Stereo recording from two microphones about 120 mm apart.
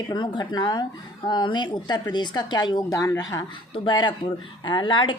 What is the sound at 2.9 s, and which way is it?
Speech, 25° left (ahead or behind).